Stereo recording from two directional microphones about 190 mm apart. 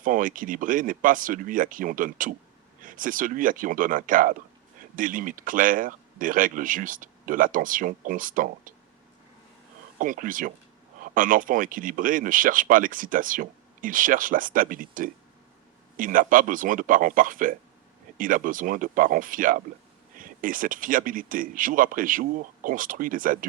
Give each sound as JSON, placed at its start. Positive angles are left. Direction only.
{"t": 0.0, "sound": "speech", "side_deg": -45}
{"t": 10.0, "sound": "speech", "side_deg": -45}